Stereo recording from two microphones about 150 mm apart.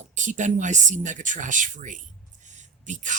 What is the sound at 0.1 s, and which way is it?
Speech, 55° right (ahead or behind).